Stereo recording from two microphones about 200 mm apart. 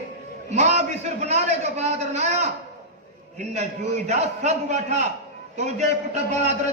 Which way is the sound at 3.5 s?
35° right (ahead or behind).